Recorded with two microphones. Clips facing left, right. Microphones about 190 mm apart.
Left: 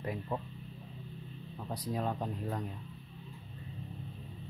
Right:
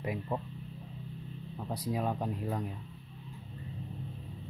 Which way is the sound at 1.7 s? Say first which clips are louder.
Right 2 dB; 10° right (ahead or behind).